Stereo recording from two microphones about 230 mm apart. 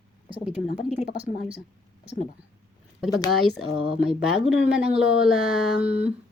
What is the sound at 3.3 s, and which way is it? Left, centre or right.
Speech, centre.